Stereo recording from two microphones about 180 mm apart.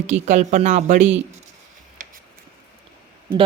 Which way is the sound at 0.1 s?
40° right (ahead or behind).